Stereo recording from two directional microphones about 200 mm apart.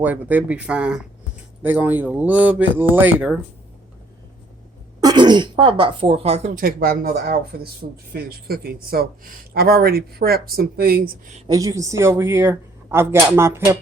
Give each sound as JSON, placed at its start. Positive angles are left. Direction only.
{"t": 0.0, "sound": "speech", "side_deg": -10}
{"t": 4.9, "sound": "speech", "side_deg": -20}
{"t": 11.3, "sound": "speech", "side_deg": -20}